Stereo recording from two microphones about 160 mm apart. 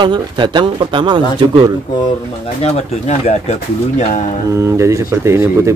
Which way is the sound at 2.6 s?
40° left (ahead or behind).